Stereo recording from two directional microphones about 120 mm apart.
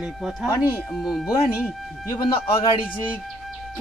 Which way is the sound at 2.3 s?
50° left (ahead or behind).